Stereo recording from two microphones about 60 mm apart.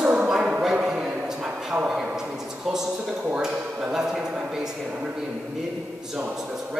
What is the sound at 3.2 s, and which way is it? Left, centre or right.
Speech, centre.